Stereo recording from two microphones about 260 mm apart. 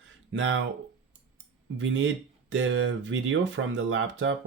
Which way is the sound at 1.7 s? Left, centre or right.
Right.